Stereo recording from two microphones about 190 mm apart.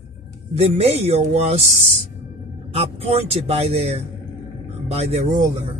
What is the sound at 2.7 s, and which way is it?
Speech, 30° right (ahead or behind).